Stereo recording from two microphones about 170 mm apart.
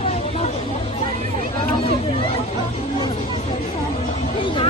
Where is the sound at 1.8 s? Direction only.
35° left (ahead or behind).